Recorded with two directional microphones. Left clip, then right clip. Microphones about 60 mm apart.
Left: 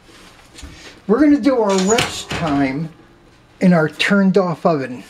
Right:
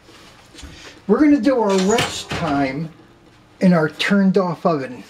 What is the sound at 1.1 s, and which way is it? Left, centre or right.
Speech, left.